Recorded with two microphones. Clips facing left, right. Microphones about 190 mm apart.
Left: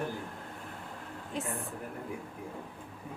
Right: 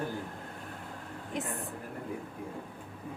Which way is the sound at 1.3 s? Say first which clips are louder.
Even; 15° right (ahead or behind).